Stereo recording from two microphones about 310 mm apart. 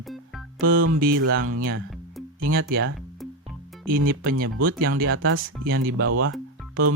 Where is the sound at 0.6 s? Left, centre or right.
Right.